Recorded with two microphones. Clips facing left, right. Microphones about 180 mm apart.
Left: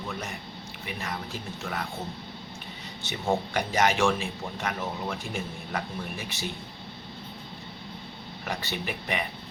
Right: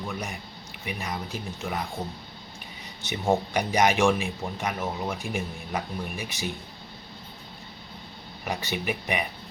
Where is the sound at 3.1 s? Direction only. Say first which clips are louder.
Right 3 dB; 15° right (ahead or behind).